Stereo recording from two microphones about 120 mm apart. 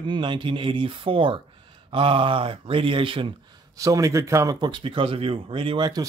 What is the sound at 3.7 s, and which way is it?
Speech, 30° right (ahead or behind).